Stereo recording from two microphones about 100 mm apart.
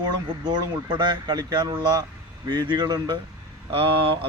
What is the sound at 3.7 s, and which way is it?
Mantra, 60° right (ahead or behind).